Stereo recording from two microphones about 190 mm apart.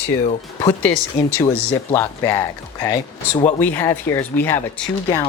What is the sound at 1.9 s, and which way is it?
Speech, 10° left (ahead or behind).